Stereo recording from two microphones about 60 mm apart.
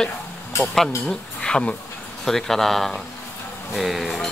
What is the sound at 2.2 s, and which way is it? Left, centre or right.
Speech, centre.